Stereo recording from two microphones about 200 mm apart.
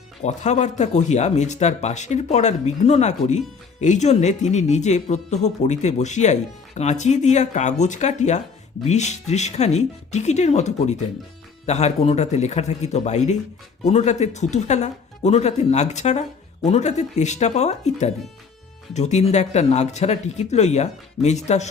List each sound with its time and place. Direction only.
0.2 s speech: 35° left (ahead or behind)